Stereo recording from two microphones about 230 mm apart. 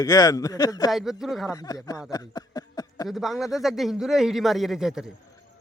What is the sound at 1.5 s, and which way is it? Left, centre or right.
Speech, centre.